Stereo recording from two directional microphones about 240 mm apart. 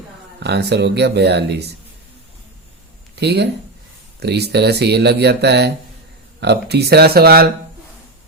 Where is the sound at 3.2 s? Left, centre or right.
Right.